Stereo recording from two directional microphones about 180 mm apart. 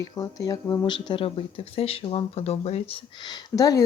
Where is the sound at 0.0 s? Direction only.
20° left (ahead or behind).